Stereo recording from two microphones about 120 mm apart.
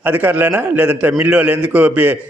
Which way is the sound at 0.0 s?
15° right (ahead or behind).